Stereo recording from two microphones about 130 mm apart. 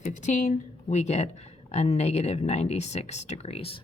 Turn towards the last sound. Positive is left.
turn(degrees=50)  # may be behind; listen again after turning